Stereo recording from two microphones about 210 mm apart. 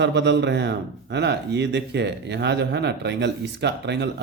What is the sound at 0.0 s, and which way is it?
Speech, 55° right (ahead or behind).